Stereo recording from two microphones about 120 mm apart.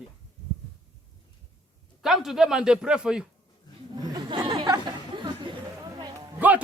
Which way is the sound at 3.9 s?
35° right (ahead or behind).